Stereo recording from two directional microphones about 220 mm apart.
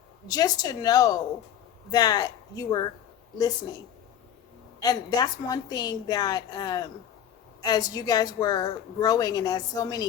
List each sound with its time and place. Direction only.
0.3 s a woman's voice: 15° left (ahead or behind)
4.8 s a woman's voice: 15° left (ahead or behind)